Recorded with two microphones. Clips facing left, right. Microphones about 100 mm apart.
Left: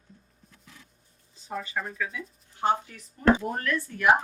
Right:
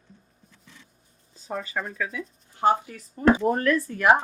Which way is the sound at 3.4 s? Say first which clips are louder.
Right 7 dB; 40° right (ahead or behind).